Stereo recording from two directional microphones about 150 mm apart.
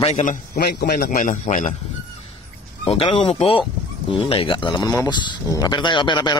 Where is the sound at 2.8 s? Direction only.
40° left (ahead or behind).